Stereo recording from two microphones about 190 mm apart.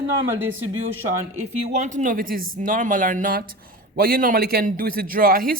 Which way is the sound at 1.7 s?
40° right (ahead or behind).